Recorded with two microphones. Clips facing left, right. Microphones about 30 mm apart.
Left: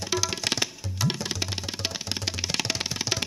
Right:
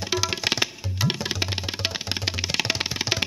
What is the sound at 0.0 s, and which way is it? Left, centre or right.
Tabla, centre.